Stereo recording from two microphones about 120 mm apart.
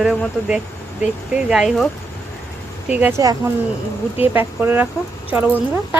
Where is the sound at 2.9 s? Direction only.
15° right (ahead or behind).